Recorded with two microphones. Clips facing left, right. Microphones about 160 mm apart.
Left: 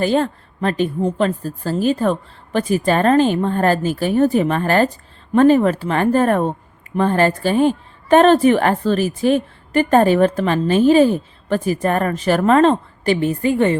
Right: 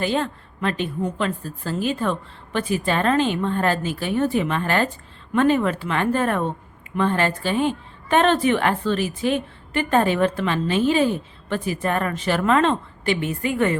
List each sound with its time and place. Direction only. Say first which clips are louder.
0.0 s a woman's voice: left 6 dB; 40° left (ahead or behind)